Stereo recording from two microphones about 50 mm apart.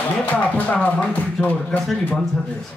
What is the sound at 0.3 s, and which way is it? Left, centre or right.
Speech, left.